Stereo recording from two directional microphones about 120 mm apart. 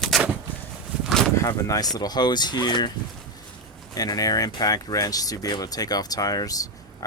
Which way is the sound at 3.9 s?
30° left (ahead or behind).